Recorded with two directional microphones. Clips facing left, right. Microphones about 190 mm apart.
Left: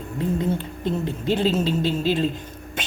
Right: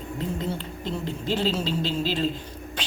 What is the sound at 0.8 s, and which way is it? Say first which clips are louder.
Finger snapping: left 5 dB; 55° left (ahead or behind).